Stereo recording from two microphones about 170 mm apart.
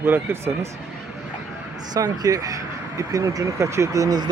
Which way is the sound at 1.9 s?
20° right (ahead or behind).